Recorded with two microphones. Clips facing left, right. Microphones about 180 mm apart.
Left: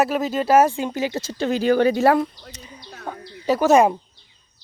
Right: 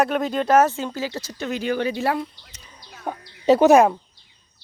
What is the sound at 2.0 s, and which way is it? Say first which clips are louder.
Speech: left 7 dB; 55° left (ahead or behind).